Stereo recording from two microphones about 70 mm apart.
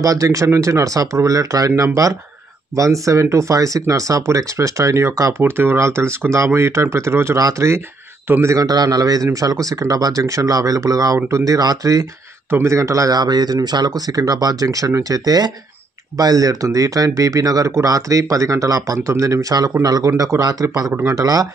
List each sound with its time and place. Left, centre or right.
0.0 s speech: right
5.4 s speech: right
5.8 s speech: right
7.3 s speech: right
8.5 s speech: right
12.4 s speech: right
12.7 s speech: right
19.8 s speech: right